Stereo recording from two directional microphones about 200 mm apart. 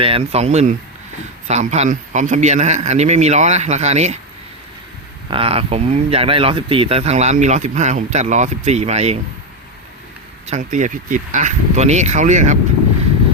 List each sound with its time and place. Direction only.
0.0 s speech: 30° right (ahead or behind)
5.3 s speech: 30° right (ahead or behind)
10.4 s speech: 35° right (ahead or behind)